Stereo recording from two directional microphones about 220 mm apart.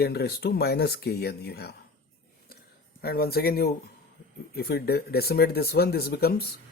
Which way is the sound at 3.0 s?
45° left (ahead or behind).